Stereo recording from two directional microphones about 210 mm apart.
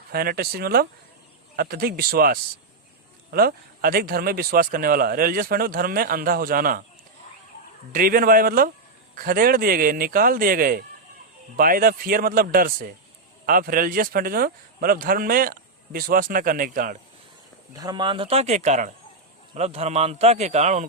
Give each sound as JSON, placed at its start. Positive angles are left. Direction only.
{"t": 0.1, "sound": "a man's voice", "side_deg": -45}
{"t": 7.9, "sound": "a man's voice", "side_deg": -45}
{"t": 17.7, "sound": "a man's voice", "side_deg": -20}